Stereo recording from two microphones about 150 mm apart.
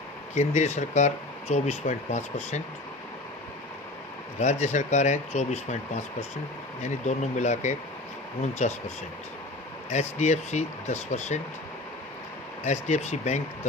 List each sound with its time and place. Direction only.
0.3 s speech: 50° left (ahead or behind)
4.6 s speech: 50° left (ahead or behind)
9.9 s speech: 50° left (ahead or behind)
12.6 s speech: 50° left (ahead or behind)